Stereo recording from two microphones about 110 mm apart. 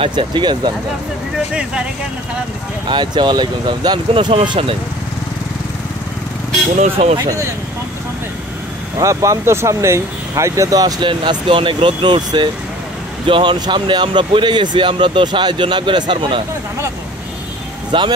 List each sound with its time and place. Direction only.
0.0 s speech: 50° right (ahead or behind)
1.5 s speech: 10° right (ahead or behind)
2.9 s speech: 45° right (ahead or behind)
4.1 s speech: 55° right (ahead or behind)
6.8 s speech: 85° right
8.9 s speech: 30° right (ahead or behind)
11.1 s speech: 50° right (ahead or behind)
17.9 s speech: 50° right (ahead or behind)